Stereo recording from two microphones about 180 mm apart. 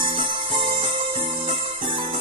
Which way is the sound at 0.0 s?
30° right (ahead or behind).